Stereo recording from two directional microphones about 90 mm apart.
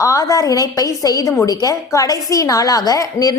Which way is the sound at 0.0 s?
35° left (ahead or behind).